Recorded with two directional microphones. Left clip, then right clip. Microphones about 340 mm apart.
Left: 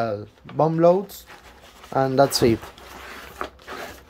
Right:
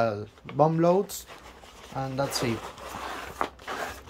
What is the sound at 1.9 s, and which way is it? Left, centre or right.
Speech, left.